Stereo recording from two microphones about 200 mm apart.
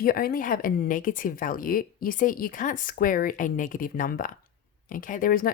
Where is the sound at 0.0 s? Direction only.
45° left (ahead or behind).